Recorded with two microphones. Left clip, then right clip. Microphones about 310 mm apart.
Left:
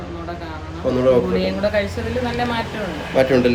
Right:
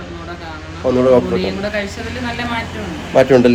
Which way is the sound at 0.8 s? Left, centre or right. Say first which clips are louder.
Right 4 dB; centre.